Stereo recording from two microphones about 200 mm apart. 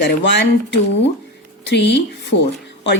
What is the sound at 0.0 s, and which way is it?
Speech, 60° left (ahead or behind).